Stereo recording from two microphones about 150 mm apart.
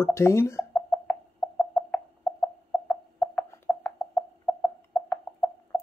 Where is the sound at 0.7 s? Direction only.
5° left (ahead or behind).